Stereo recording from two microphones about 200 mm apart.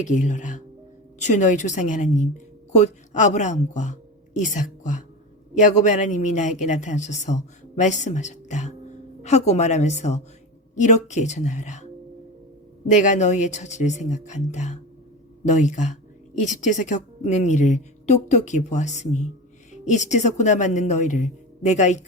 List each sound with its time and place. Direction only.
0.0 s speech: 40° left (ahead or behind)
12.9 s speech: 35° left (ahead or behind)